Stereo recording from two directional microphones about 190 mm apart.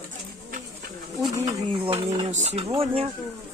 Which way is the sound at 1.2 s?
20° right (ahead or behind).